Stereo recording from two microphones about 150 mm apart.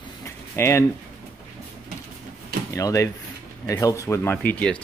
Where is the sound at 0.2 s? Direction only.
20° left (ahead or behind).